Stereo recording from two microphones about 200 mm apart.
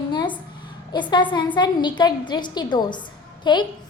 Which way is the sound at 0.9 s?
25° left (ahead or behind).